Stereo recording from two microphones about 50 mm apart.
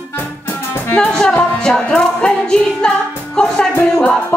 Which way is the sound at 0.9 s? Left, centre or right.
Left.